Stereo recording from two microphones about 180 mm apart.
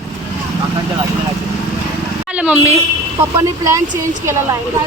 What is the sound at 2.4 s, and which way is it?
Speech, 10° right (ahead or behind).